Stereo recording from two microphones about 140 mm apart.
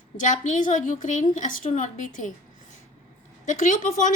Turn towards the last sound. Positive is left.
turn(degrees=70)  # may be behind; listen again after turning